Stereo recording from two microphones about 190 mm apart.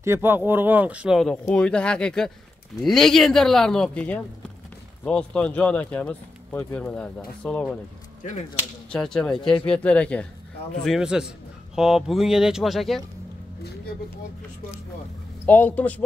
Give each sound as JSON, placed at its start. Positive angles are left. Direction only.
{"t": 0.0, "sound": "a man's voice", "side_deg": -10}
{"t": 8.2, "sound": "speech", "side_deg": 40}
{"t": 8.9, "sound": "a man's voice", "side_deg": 5}
{"t": 15.4, "sound": "speech", "side_deg": 10}